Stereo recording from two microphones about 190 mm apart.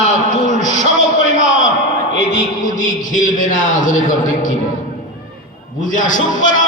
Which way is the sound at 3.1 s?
45° left (ahead or behind).